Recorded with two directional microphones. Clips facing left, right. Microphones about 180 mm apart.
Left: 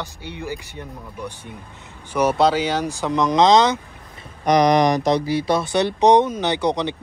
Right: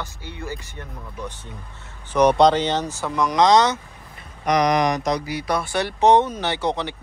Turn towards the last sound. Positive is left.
turn(degrees=15)  # may be behind; listen again after turning